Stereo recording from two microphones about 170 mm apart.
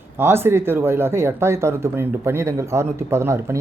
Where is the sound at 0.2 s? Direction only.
15° right (ahead or behind).